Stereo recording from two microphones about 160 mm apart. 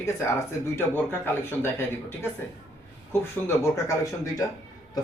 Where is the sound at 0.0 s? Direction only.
15° left (ahead or behind).